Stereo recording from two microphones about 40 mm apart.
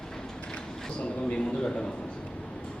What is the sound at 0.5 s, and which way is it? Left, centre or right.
A man's voice, left.